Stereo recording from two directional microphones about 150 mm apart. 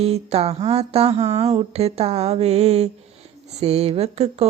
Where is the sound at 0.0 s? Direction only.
40° right (ahead or behind).